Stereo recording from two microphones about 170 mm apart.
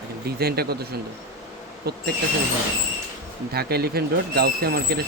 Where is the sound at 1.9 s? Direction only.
65° right (ahead or behind).